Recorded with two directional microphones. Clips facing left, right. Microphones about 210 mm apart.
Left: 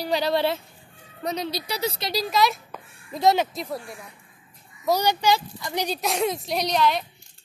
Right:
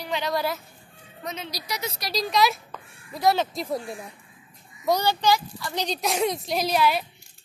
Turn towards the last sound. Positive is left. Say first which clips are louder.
# even
turn(degrees=-5)  # may be behind; listen again after turning